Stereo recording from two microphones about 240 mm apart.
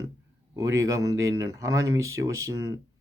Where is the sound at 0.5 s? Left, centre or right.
Centre.